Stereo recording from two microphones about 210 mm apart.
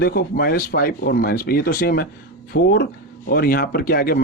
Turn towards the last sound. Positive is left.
turn(degrees=45)  # may be behind; listen again after turning